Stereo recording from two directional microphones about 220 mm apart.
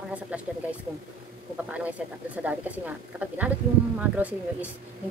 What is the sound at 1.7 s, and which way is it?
A woman's voice, 5° right (ahead or behind).